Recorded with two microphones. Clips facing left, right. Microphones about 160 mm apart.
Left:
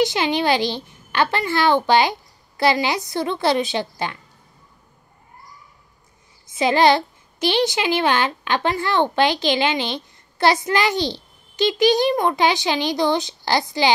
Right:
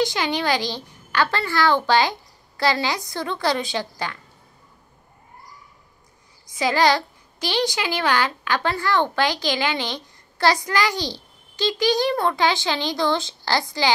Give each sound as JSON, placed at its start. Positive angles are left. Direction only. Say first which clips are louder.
{"t": 0.0, "sound": "a child's voice", "louder": "left 3 dB", "side_deg": 20}
{"t": 6.4, "sound": "a child's voice", "louder": "left 3 dB", "side_deg": 20}